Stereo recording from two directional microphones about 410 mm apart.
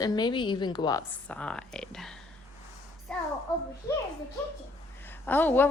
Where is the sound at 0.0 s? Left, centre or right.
Centre.